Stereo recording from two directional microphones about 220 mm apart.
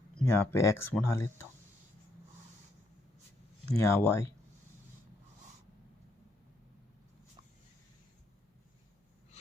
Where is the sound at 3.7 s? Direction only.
10° left (ahead or behind).